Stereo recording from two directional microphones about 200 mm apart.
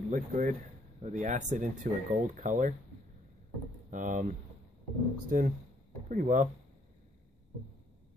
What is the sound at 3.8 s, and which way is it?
Speech, 40° right (ahead or behind).